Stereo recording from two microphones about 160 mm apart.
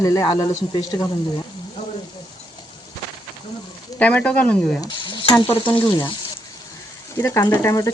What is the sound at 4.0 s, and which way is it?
Speech, 10° left (ahead or behind).